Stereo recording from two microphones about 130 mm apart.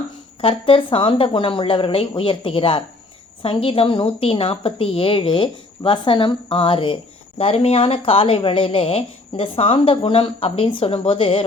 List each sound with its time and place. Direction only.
0.4 s a woman's voice: 45° left (ahead or behind)